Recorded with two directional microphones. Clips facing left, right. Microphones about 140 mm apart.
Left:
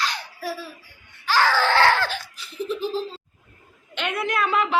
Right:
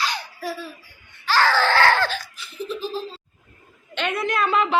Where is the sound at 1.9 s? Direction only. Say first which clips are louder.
Right 1 dB; 10° left (ahead or behind).